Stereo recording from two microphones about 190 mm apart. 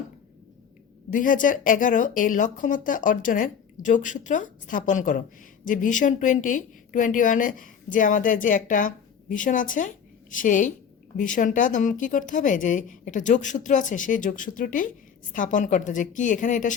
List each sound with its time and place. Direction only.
1.1 s a woman's voice: 45° left (ahead or behind)